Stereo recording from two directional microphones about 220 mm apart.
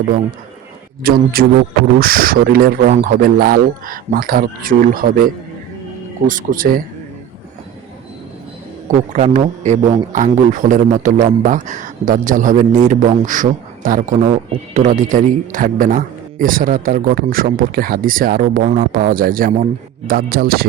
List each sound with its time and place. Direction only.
1.0 s a man's voice: 45° right (ahead or behind)
6.2 s a man's voice: 40° right (ahead or behind)
9.1 s a man's voice: 30° right (ahead or behind)